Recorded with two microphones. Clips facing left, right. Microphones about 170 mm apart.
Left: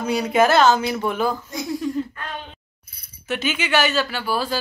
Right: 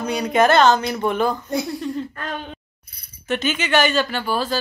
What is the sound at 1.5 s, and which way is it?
Speech, 65° right (ahead or behind).